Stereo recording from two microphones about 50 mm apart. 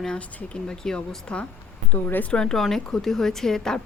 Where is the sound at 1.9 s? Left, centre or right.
Left.